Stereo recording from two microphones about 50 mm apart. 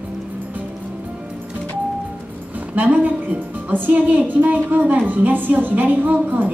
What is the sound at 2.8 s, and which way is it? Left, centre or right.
A woman's voice, right.